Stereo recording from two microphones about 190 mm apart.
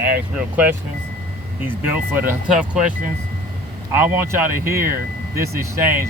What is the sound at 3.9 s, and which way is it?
Speech, 10° right (ahead or behind).